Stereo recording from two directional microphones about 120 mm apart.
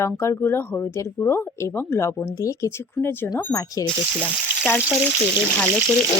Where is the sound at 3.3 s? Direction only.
30° left (ahead or behind).